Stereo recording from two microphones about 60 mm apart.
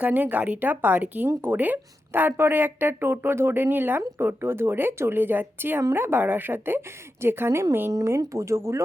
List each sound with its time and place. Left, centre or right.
0.0 s speech: right
8.2 s speech: right